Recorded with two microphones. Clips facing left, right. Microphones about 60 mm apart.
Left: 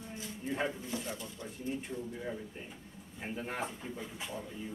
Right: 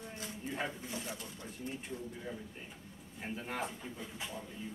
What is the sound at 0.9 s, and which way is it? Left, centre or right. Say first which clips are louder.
Speech: left 3 dB; centre.